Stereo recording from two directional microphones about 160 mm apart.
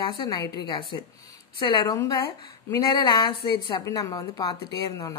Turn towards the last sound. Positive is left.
turn(degrees=20)  # may be behind; listen again after turning